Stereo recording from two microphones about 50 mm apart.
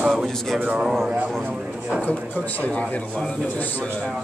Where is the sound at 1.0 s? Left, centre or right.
Right.